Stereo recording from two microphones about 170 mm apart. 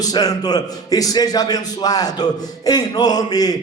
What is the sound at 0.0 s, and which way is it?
A man's voice, 20° left (ahead or behind).